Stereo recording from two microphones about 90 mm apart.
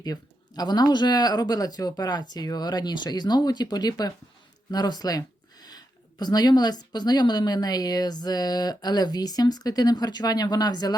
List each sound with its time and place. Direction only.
0.0 s speech: 45° left (ahead or behind)